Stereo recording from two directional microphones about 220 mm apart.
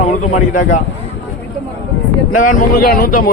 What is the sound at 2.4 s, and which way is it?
Speech, 40° left (ahead or behind).